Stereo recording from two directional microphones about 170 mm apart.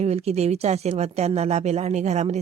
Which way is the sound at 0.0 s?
40° right (ahead or behind).